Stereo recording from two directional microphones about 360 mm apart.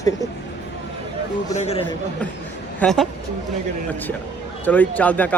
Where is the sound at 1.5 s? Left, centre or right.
Centre.